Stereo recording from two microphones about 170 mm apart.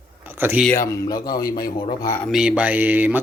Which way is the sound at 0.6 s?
10° left (ahead or behind).